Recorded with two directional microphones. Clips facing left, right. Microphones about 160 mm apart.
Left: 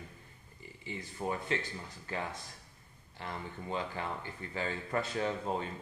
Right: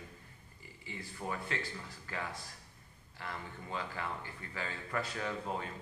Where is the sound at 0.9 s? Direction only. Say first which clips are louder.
Left 4 dB; 20° left (ahead or behind).